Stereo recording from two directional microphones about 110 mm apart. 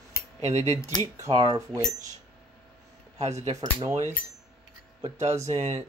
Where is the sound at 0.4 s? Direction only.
90° right.